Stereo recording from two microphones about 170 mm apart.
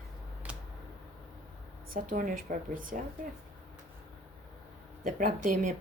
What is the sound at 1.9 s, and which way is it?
A woman's voice, 55° right (ahead or behind).